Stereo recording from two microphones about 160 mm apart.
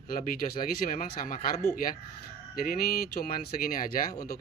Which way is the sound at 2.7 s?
60° left (ahead or behind).